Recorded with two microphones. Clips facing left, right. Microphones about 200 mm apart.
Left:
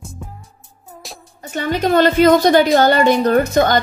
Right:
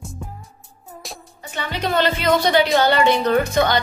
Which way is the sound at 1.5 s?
45° left (ahead or behind).